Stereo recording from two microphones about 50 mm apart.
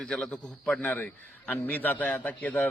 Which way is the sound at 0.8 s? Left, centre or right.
Left.